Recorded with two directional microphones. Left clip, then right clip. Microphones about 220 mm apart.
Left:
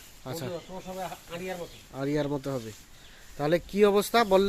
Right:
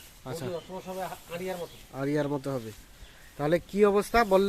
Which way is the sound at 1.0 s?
15° right (ahead or behind).